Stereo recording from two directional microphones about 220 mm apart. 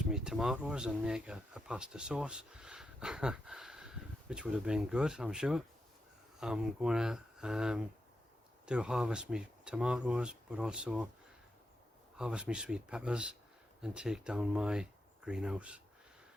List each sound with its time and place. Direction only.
0.1 s speech: centre (ahead or behind)
12.1 s speech: 5° right (ahead or behind)